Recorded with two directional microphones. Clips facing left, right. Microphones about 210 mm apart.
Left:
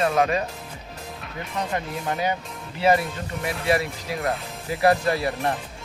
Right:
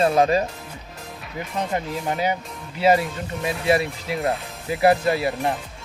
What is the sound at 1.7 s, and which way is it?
Speech, 20° right (ahead or behind).